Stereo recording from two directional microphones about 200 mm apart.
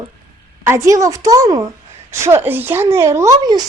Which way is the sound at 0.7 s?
15° right (ahead or behind).